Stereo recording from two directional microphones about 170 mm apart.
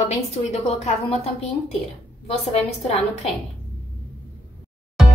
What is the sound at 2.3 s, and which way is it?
A woman's voice, 35° left (ahead or behind).